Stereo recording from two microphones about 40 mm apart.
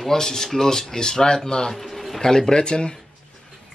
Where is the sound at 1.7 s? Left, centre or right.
Centre; by 3.0 s left.